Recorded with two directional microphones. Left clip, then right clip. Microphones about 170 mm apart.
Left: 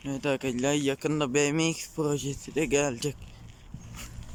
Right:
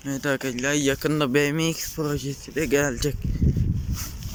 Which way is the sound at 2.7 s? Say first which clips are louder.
Right 6 dB; 5° left (ahead or behind).